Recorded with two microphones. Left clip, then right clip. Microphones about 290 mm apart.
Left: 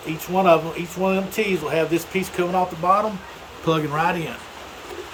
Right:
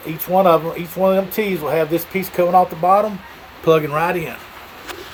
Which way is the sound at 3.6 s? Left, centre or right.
Centre.